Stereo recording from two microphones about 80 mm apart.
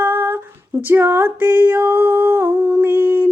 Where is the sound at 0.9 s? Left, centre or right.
Right.